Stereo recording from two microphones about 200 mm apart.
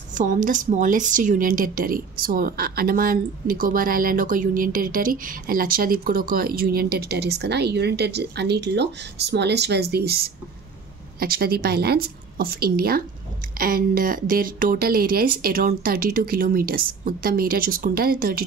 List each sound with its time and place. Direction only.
0.2 s speech: 40° right (ahead or behind)